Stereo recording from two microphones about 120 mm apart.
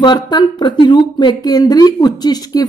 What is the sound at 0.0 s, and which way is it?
Speech, 40° left (ahead or behind).